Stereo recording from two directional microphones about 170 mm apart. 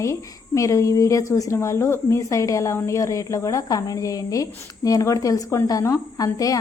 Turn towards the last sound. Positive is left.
turn(degrees=20)  # may be behind; listen again after turning